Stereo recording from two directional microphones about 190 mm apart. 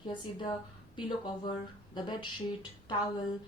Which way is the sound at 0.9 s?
25° left (ahead or behind).